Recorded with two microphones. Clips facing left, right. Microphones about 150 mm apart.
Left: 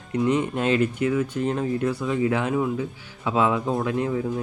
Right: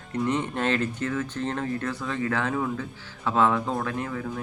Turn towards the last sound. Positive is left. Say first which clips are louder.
# left 5 dB
turn(degrees=20)  # may be behind; listen again after turning